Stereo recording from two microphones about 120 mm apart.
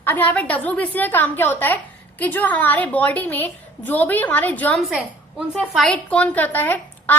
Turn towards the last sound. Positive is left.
turn(degrees=15)  # may be behind; listen again after turning